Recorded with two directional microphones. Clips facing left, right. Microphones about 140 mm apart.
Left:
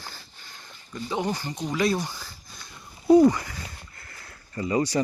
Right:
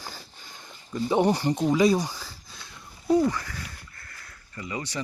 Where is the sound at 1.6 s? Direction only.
15° right (ahead or behind).